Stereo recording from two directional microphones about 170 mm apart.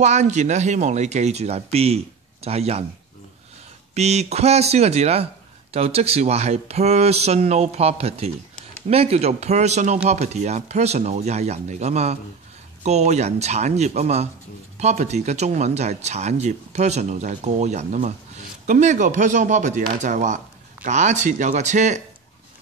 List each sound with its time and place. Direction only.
0.0 s speech: 45° right (ahead or behind)
3.9 s speech: 40° right (ahead or behind)